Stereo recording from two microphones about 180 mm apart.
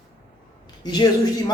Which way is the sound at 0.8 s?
25° left (ahead or behind).